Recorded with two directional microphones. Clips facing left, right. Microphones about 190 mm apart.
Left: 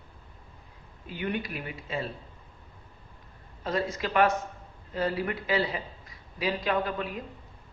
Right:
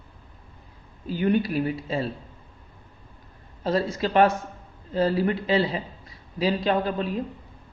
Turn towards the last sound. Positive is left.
turn(degrees=-30)  # may be behind; listen again after turning